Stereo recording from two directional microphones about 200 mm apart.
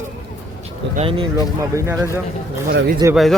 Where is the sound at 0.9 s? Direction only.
30° right (ahead or behind).